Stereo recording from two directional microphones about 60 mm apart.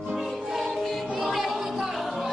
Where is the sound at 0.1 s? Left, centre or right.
Centre.